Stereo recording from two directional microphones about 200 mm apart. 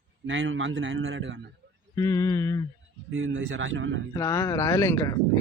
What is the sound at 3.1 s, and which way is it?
Speech, 75° right (ahead or behind).